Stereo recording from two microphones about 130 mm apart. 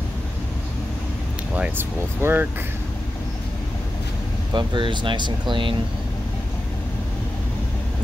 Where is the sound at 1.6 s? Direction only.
15° right (ahead or behind).